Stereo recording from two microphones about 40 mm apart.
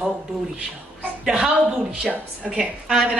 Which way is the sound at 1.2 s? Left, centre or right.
Centre.